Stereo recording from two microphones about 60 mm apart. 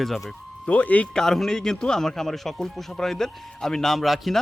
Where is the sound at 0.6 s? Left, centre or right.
Left.